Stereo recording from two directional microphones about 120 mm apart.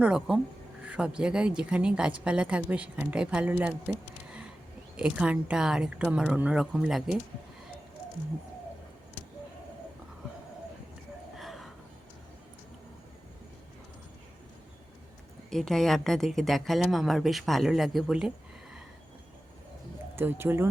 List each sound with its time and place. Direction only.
0.0 s a woman's voice: 5° right (ahead or behind)
4.9 s a woman's voice: 10° right (ahead or behind)
11.3 s gasp: centre (ahead or behind)
15.4 s speech: 5° left (ahead or behind)
20.1 s speech: 20° right (ahead or behind)